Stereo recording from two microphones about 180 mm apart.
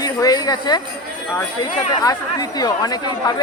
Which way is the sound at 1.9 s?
20° left (ahead or behind).